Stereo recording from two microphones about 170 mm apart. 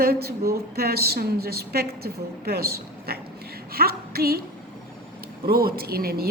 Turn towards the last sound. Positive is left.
turn(degrees=-65)  # may be behind; listen again after turning